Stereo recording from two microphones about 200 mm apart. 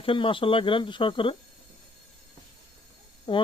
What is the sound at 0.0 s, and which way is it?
Speech, 25° left (ahead or behind).